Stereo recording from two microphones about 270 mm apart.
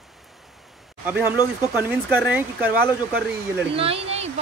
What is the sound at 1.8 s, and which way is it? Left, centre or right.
Speech, centre.